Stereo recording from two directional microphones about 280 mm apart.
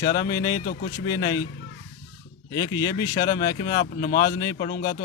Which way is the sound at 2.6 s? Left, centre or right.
Centre.